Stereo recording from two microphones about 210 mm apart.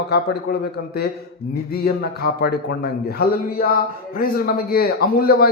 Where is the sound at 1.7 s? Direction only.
50° left (ahead or behind).